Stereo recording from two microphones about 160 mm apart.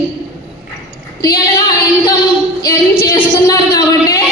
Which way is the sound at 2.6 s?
20° left (ahead or behind).